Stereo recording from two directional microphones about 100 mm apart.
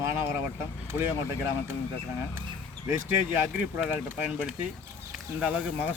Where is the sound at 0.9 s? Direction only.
25° right (ahead or behind).